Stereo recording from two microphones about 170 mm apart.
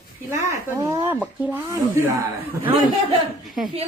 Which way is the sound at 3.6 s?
5° right (ahead or behind).